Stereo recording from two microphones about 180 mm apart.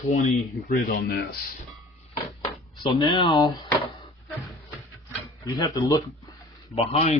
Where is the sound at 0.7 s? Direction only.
50° left (ahead or behind).